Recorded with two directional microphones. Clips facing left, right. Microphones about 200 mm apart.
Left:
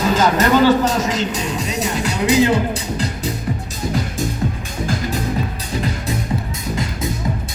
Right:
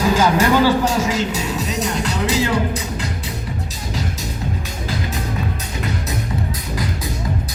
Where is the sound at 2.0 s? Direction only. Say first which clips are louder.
Left 7 dB; 15° left (ahead or behind).